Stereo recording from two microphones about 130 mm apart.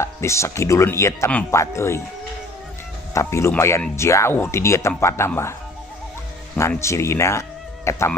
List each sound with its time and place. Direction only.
0.0 s speech: 20° left (ahead or behind)
3.2 s speech: 20° left (ahead or behind)
6.8 s speech: 20° left (ahead or behind)